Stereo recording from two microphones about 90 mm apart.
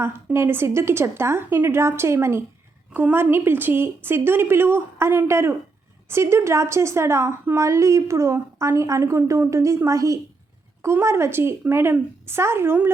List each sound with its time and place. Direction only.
0.3 s a woman's voice: 25° right (ahead or behind)